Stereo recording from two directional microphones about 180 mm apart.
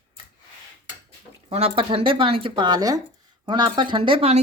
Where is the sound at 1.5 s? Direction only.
35° right (ahead or behind).